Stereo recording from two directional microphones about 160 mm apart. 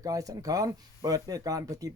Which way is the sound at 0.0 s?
20° right (ahead or behind).